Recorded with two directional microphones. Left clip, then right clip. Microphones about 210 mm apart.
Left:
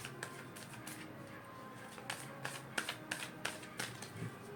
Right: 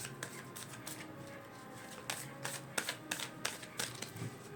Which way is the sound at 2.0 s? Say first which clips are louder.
Right 1 dB; 30° right (ahead or behind).